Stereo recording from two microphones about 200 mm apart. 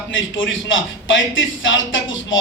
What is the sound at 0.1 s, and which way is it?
Speech, 75° left (ahead or behind).